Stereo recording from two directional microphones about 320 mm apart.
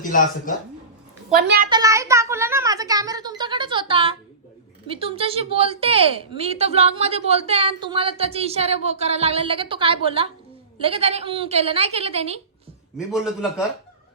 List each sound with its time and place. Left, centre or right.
0.0 s speech: left
1.3 s a woman's voice: right
1.7 s a woman's voice: centre
13.1 s speech: centre